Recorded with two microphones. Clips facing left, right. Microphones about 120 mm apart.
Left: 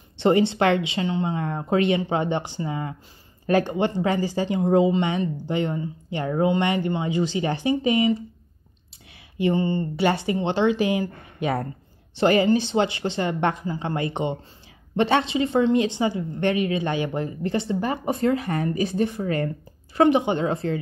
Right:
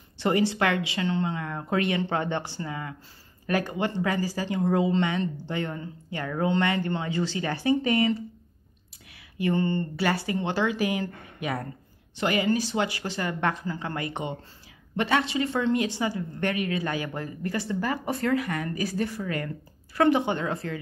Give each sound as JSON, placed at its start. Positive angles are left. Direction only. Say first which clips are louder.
{"t": 0.2, "sound": "a woman's voice", "louder": "left 5 dB", "side_deg": 25}
{"t": 9.4, "sound": "a woman's voice", "louder": "left 3 dB", "side_deg": 15}
{"t": 20.0, "sound": "a woman's voice", "louder": "left 4 dB", "side_deg": 20}